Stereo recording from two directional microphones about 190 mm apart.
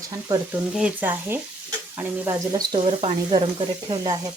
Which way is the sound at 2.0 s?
20° right (ahead or behind).